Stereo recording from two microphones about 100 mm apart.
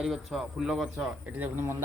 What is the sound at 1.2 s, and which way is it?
Speech, 20° right (ahead or behind).